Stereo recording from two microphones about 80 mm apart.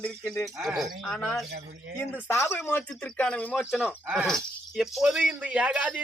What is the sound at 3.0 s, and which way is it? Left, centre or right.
Speech, centre.